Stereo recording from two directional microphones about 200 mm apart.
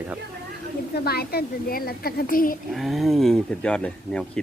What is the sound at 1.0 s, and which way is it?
A woman's voice, 50° left (ahead or behind).